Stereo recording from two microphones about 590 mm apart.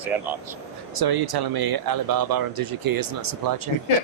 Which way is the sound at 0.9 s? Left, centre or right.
Right.